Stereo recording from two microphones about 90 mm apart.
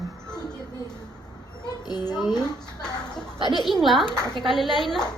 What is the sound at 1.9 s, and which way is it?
Speech, 50° left (ahead or behind).